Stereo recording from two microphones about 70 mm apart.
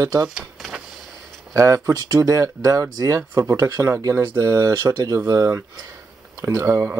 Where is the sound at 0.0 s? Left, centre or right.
Right.